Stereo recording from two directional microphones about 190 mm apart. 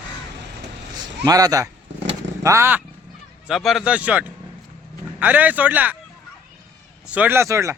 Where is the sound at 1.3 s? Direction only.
20° right (ahead or behind).